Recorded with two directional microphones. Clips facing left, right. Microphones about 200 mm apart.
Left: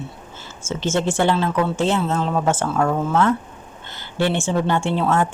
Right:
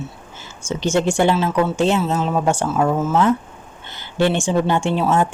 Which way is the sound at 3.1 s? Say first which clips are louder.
Right 2 dB; 20° right (ahead or behind).